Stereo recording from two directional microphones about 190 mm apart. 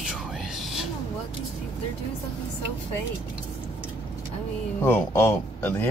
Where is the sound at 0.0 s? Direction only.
5° right (ahead or behind).